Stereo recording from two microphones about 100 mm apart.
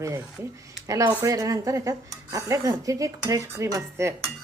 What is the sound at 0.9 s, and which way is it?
Speech, 35° right (ahead or behind).